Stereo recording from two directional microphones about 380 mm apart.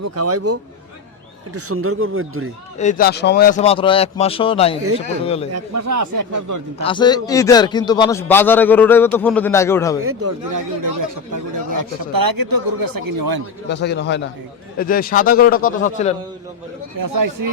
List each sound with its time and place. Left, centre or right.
0.0 s speech: right
1.5 s speech: right
2.7 s a man's voice: left
5.5 s speech: right
6.8 s a man's voice: centre
10.0 s speech: right
10.5 s speech: right
13.7 s a man's voice: left
17.0 s speech: right